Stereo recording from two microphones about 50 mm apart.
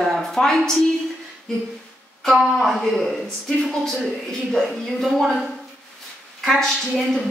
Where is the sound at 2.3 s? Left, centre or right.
Centre.